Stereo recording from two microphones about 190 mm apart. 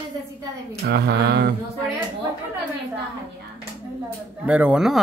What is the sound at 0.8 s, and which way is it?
Speech, 60° right (ahead or behind).